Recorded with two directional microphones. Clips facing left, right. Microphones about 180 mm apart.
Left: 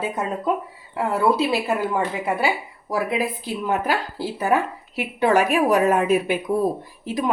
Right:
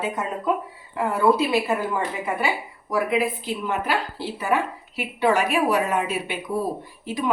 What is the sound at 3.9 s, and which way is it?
A woman's voice, 40° left (ahead or behind).